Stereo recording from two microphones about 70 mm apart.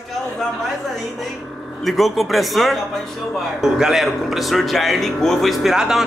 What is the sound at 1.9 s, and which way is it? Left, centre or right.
Speech, centre.